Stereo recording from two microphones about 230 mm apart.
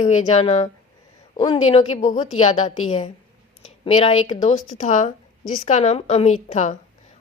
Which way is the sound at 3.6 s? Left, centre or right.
Left.